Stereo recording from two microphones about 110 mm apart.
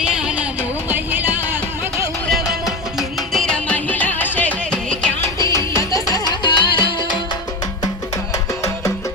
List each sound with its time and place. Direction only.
0.0 s music: 10° right (ahead or behind)
2.3 s music: 5° right (ahead or behind)
5.4 s music: 30° left (ahead or behind)